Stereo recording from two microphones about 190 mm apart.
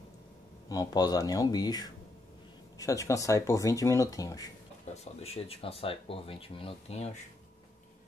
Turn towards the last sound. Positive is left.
turn(degrees=35)  # may be behind; listen again after turning